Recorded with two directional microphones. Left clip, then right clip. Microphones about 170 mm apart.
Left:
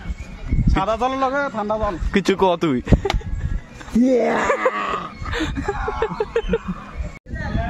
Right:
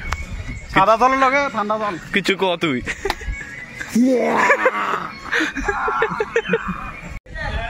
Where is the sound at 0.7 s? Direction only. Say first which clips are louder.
Right 7 dB; 25° right (ahead or behind).